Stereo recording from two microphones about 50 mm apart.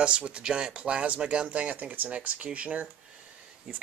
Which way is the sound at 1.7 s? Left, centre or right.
Right.